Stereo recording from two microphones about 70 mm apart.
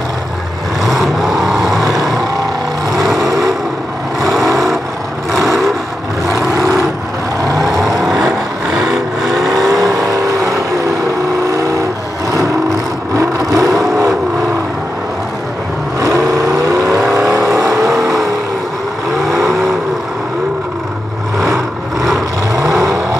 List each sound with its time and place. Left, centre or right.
0.8 s vehicle: centre
3.2 s vehicle: right
6.5 s vehicle: right
7.8 s vehicle: centre
9.9 s vehicle: right
13.1 s vehicle: right
16.0 s vehicle: right
22.5 s vehicle: right